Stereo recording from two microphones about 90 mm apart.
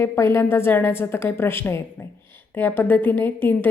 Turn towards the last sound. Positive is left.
turn(degrees=25)  # may be behind; listen again after turning